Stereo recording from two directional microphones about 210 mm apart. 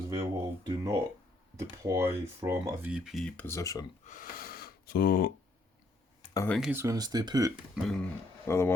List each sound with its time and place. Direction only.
0.2 s speech: 15° right (ahead or behind); by 3.8 s 15° left (ahead or behind)
4.0 s gasp: 40° left (ahead or behind)
6.3 s speech: 10° left (ahead or behind)
6.6 s speech: 10° right (ahead or behind)
7.8 s speech: centre (ahead or behind)
8.4 s speech: 10° left (ahead or behind)